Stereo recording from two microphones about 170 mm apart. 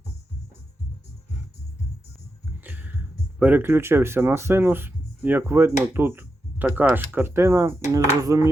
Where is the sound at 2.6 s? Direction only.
10° right (ahead or behind).